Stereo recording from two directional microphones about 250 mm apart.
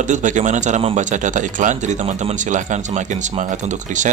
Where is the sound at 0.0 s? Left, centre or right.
Right.